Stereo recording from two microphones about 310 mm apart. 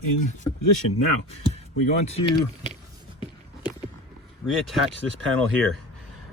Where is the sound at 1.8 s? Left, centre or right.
Left.